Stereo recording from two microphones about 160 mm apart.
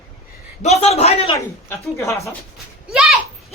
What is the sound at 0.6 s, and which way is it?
Speech, 40° left (ahead or behind).